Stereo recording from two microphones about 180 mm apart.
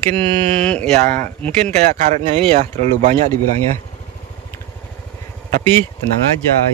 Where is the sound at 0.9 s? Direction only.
45° right (ahead or behind).